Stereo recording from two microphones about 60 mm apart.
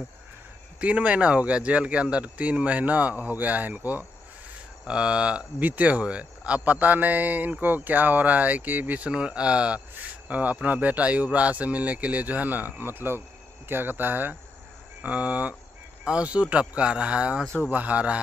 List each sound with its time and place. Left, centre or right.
0.7 s speech: right
4.8 s speech: centre
5.6 s speech: right